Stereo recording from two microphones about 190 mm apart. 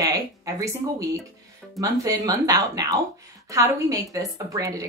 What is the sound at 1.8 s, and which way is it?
A woman's voice, 20° right (ahead or behind).